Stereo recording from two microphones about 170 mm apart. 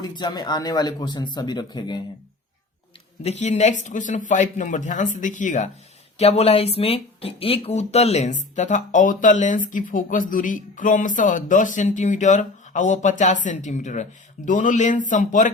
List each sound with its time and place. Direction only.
0.0 s speech: 25° left (ahead or behind)
3.2 s speech: 40° left (ahead or behind)
6.1 s speech: 35° left (ahead or behind)